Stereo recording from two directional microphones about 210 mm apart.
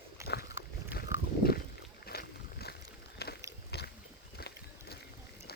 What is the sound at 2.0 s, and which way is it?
Boat, 50° left (ahead or behind).